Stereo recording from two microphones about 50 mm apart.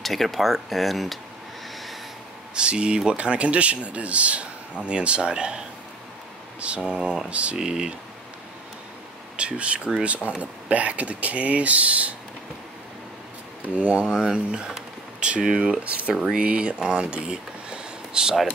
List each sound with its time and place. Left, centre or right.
0.0 s speech: centre
2.5 s speech: centre
6.8 s speech: centre
7.5 s speech: centre
9.4 s speech: right
13.7 s speech: right